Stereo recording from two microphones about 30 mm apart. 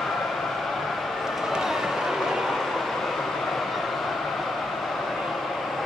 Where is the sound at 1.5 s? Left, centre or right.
Centre.